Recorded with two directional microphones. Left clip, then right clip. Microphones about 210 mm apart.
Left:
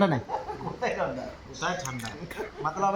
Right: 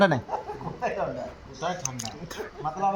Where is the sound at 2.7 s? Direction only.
10° left (ahead or behind).